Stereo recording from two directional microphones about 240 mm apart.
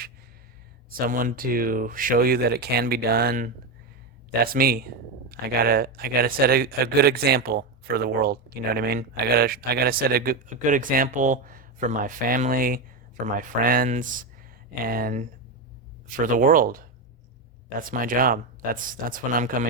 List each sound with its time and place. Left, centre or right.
0.9 s speech: right